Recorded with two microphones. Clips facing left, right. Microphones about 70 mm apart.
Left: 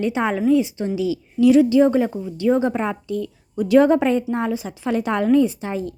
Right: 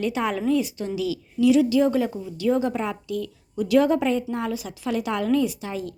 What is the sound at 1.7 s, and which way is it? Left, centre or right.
A woman's voice, left.